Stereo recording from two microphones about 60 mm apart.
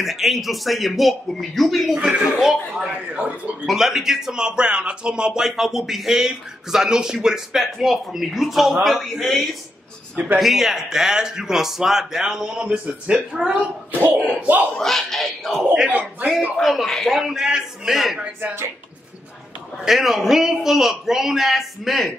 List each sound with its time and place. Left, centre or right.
0.0 s a man's voice: centre
2.0 s a man's voice: centre
2.2 s a man's voice: centre
10.1 s a man's voice: right
10.4 s a man's voice: centre; by 13.1 s right
13.1 s a man's voice: centre
14.4 s a man's voice: right
14.8 s a man's voice: centre
15.9 s a man's voice: right
16.5 s a man's voice: centre
17.2 s a man's voice: centre
19.8 s a man's voice: centre